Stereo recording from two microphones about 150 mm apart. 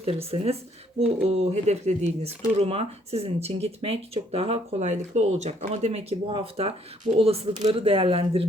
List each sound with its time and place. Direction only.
0.0 s speech: 40° right (ahead or behind)